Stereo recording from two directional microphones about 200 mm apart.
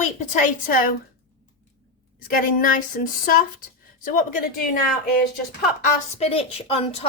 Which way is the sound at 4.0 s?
40° left (ahead or behind).